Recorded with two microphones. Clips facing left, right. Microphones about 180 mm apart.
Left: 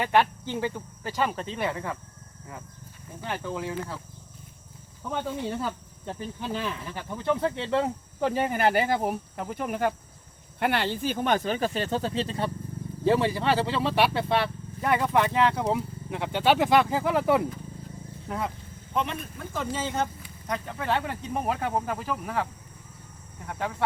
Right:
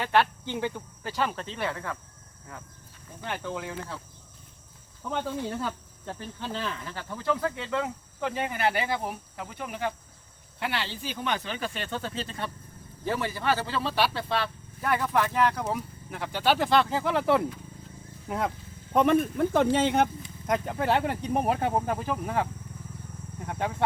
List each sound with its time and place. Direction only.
0.0 s speech: 10° left (ahead or behind)
3.2 s speech: 5° left (ahead or behind)
5.0 s speech: 5° left (ahead or behind)
6.1 s speech: 15° left (ahead or behind)
16.6 s speech: 10° left (ahead or behind)
18.3 s speech: 10° right (ahead or behind)
18.9 s speech: 60° right (ahead or behind)
20.5 s speech: 45° right (ahead or behind)
21.8 s speech: 5° right (ahead or behind)